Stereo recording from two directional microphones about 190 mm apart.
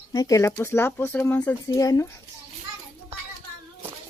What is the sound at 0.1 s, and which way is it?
Speech, 20° left (ahead or behind).